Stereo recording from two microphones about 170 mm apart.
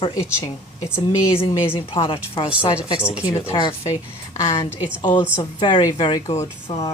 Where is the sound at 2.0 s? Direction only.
30° left (ahead or behind).